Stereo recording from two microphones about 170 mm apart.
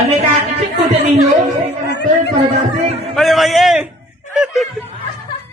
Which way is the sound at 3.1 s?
Centre (ahead or behind).